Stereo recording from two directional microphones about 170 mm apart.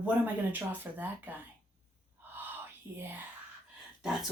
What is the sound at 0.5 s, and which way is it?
Speech, 10° right (ahead or behind).